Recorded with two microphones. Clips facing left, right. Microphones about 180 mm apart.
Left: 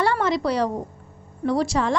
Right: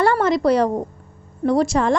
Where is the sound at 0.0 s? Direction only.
50° right (ahead or behind).